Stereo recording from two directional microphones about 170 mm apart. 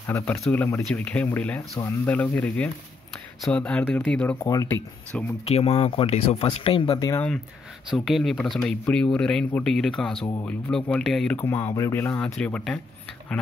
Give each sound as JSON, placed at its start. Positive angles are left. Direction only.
{"t": 0.0, "sound": "speech", "side_deg": 15}
{"t": 4.4, "sound": "speech", "side_deg": 20}
{"t": 5.4, "sound": "speech", "side_deg": 35}
{"t": 7.1, "sound": "speech", "side_deg": 10}
{"t": 7.9, "sound": "speech", "side_deg": 0}